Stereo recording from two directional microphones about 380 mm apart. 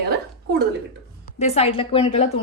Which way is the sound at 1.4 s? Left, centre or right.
Centre.